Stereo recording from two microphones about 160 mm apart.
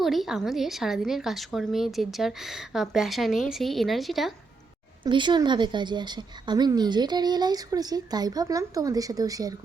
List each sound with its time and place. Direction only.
0.0 s a woman's voice: centre (ahead or behind)
5.0 s a woman's voice: 30° right (ahead or behind)